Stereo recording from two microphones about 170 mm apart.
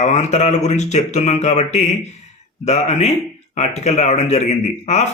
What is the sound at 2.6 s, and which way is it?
Speech, 40° left (ahead or behind).